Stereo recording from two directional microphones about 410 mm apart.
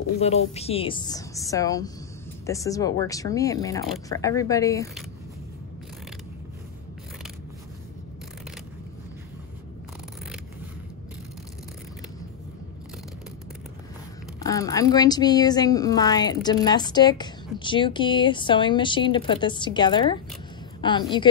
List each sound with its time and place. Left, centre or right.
0.6 s speech: centre
14.4 s speech: centre